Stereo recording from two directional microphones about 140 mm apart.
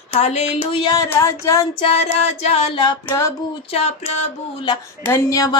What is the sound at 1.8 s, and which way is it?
Music, 45° left (ahead or behind).